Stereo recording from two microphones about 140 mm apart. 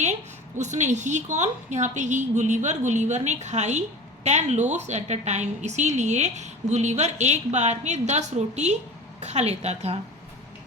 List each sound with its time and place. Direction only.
0.0 s a woman's voice: 55° right (ahead or behind)